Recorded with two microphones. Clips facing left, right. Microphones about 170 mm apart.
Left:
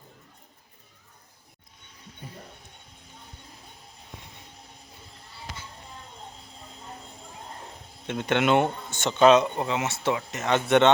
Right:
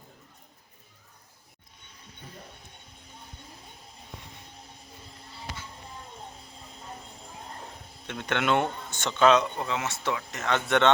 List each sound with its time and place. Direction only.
8.0 s speech: 20° left (ahead or behind)